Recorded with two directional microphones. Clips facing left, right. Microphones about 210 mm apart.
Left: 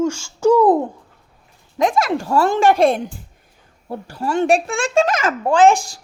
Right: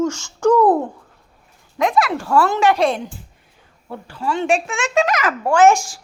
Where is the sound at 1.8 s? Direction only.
45° left (ahead or behind); by 5.6 s 20° left (ahead or behind).